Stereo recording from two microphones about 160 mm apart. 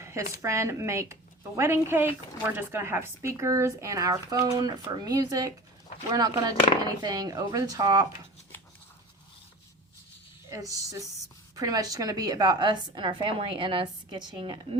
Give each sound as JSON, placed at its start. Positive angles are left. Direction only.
{"t": 0.0, "sound": "a sound", "side_deg": -15}
{"t": 0.4, "sound": "a woman's voice", "side_deg": -15}
{"t": 10.5, "sound": "a woman's voice", "side_deg": -20}